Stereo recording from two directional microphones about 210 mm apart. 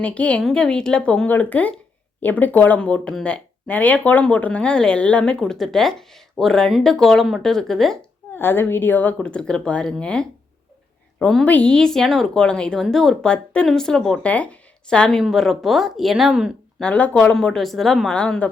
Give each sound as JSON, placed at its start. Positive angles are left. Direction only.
{"t": 0.0, "sound": "speech", "side_deg": 5}